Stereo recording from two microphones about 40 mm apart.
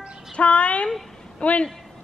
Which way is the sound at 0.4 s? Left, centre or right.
Left.